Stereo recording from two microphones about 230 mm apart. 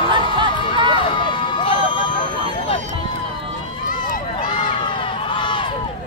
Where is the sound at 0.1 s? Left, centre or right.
Right.